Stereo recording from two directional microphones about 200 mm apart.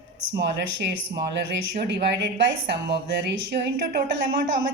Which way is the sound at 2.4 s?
60° right (ahead or behind).